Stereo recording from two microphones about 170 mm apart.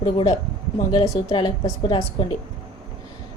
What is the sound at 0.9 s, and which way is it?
A woman's voice, 30° left (ahead or behind).